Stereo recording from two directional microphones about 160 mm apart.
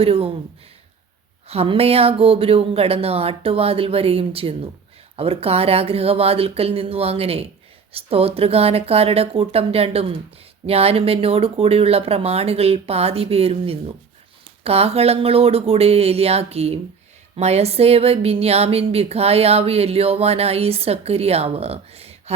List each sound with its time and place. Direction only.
0.0 s speech: 35° right (ahead or behind)
1.5 s speech: 35° right (ahead or behind)